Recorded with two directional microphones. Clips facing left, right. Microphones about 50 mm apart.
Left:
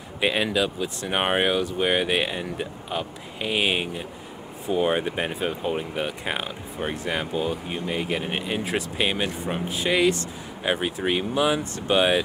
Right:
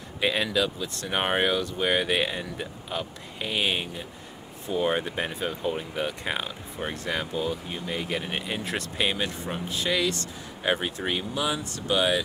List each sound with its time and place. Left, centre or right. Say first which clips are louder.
0.2 s speech: left 2 dB; centre
10.6 s speech: left 2 dB; centre; by 12.2 s left